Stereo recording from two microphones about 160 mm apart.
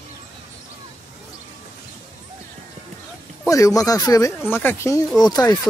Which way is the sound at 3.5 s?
20° left (ahead or behind).